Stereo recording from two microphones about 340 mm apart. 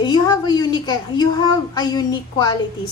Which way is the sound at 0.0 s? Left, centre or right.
Centre.